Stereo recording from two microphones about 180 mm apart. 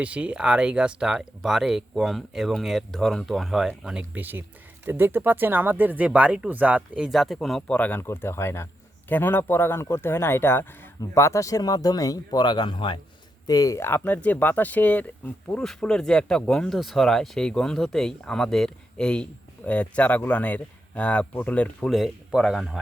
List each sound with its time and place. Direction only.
0.0 s a man's voice: 5° right (ahead or behind)